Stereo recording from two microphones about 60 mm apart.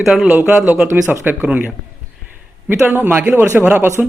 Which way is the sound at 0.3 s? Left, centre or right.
Right.